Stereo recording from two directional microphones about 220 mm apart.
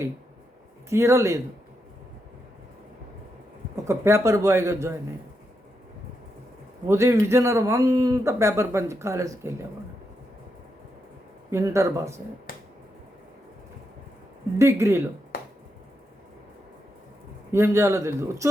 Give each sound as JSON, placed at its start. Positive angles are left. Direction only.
{"t": 0.9, "sound": "a man's voice", "side_deg": -10}
{"t": 3.8, "sound": "a man's voice", "side_deg": -10}
{"t": 6.8, "sound": "a man's voice", "side_deg": -10}
{"t": 11.5, "sound": "a man's voice", "side_deg": -15}
{"t": 14.6, "sound": "a man's voice", "side_deg": -10}
{"t": 15.3, "sound": "finger snapping", "side_deg": 40}
{"t": 17.5, "sound": "a man's voice", "side_deg": -10}